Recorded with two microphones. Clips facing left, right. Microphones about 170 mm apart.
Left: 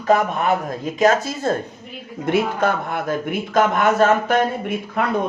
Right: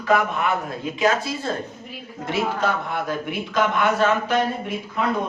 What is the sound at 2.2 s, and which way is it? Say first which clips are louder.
Speech: left 4 dB; 55° left (ahead or behind).